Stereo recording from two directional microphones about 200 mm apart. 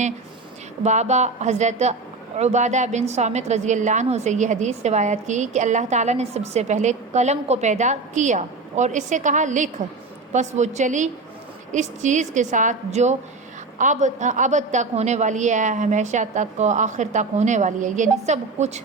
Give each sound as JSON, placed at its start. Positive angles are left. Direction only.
{"t": 0.9, "sound": "a woman's voice", "side_deg": -35}